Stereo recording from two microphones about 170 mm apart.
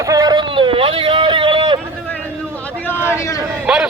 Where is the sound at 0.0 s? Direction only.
20° right (ahead or behind).